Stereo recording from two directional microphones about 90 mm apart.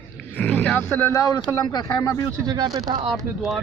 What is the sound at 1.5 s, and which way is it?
Speech, 50° left (ahead or behind).